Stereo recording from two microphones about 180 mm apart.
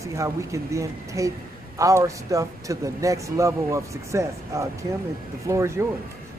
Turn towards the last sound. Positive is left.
turn(degrees=-15)  # may be behind; listen again after turning